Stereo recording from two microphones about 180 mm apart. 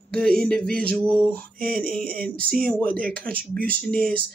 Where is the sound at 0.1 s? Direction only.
5° left (ahead or behind).